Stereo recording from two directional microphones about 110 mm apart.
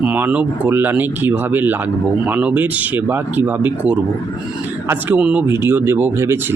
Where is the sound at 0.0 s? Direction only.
15° right (ahead or behind).